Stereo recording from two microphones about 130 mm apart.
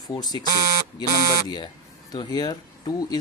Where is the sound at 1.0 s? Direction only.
35° left (ahead or behind).